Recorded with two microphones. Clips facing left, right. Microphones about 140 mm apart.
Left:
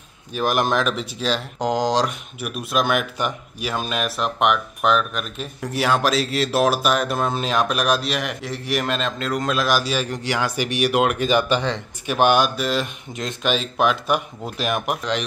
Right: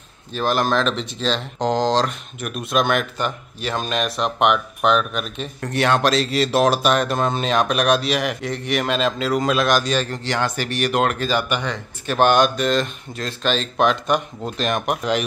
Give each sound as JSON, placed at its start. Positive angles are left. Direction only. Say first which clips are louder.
{"t": 0.3, "sound": "speech", "louder": "right 1 dB", "side_deg": 10}
{"t": 11.4, "sound": "speech", "louder": "left 3 dB", "side_deg": 30}
{"t": 12.1, "sound": "speech", "louder": "right 1 dB", "side_deg": 10}